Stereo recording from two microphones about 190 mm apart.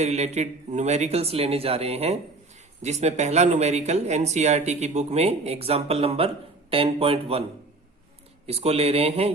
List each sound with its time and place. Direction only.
0.0 s speech: 35° right (ahead or behind)
8.4 s speech: 30° right (ahead or behind)